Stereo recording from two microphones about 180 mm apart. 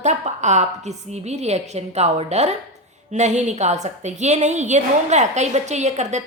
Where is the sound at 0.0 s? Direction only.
40° right (ahead or behind).